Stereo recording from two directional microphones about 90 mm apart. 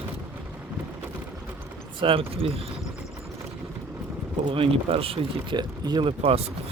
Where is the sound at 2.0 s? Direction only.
90° right.